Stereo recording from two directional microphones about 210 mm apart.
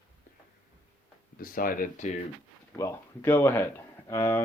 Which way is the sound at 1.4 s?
40° left (ahead or behind).